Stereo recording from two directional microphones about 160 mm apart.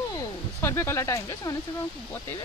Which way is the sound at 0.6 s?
15° left (ahead or behind).